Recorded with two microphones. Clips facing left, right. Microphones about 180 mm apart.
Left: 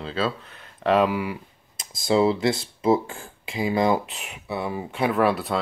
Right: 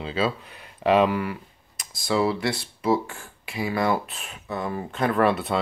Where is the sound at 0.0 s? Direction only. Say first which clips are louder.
Right 1 dB; 5° right (ahead or behind).